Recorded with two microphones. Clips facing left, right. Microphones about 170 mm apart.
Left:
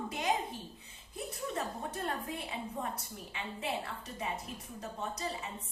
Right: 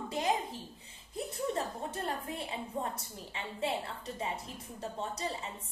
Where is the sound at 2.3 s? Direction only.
30° right (ahead or behind).